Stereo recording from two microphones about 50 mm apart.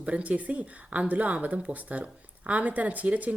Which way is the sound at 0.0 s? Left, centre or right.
Right.